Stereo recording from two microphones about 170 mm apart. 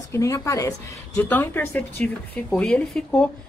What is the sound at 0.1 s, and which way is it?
A woman's voice, 15° left (ahead or behind).